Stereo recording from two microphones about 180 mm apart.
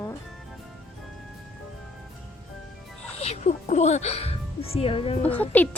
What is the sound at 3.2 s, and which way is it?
Speech, 35° left (ahead or behind).